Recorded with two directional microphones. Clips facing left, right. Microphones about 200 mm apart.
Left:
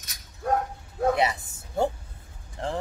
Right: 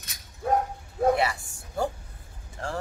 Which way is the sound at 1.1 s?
20° left (ahead or behind).